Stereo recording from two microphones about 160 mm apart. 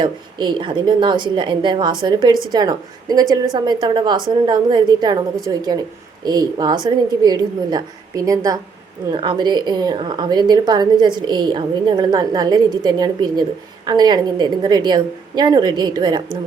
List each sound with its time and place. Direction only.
0.0 s a woman's voice: 30° right (ahead or behind)